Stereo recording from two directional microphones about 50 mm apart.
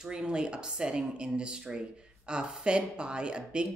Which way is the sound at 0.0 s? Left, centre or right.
Centre.